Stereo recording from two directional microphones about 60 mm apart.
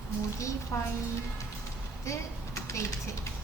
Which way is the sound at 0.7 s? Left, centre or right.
Left.